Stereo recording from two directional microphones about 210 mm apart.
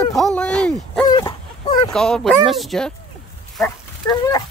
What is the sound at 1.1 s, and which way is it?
Dog, 20° left (ahead or behind).